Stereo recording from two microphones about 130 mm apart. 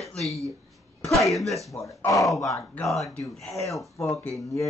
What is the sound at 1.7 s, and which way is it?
Speech, 25° left (ahead or behind).